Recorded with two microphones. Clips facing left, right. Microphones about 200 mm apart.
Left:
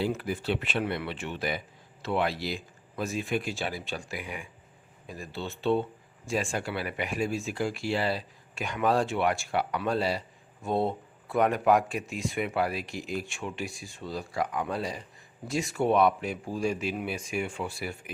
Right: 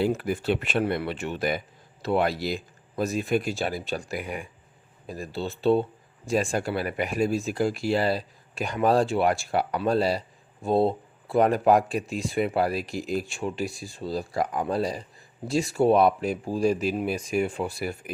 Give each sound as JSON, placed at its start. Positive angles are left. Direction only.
{"t": 0.0, "sound": "speech", "side_deg": -50}